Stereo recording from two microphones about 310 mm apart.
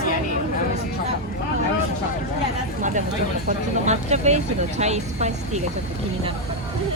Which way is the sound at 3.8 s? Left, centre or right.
Right.